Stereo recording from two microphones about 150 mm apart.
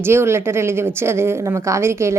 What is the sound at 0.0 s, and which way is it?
A woman's voice, 15° right (ahead or behind).